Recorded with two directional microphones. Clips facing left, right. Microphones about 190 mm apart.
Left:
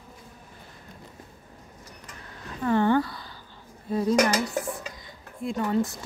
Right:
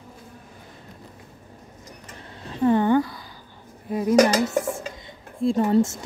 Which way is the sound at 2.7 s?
15° right (ahead or behind).